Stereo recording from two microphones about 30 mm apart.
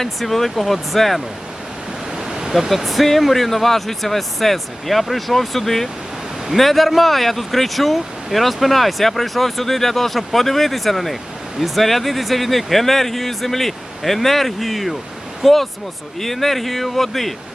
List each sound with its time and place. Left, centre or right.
0.2 s speech: centre
2.1 s waves: right
2.5 s speech: centre
16.2 s speech: centre